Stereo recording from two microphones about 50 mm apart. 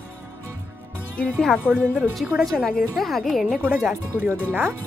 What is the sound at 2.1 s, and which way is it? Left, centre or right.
Speech, centre.